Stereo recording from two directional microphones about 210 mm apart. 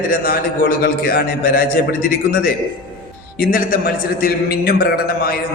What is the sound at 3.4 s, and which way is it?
A man's voice, 45° left (ahead or behind).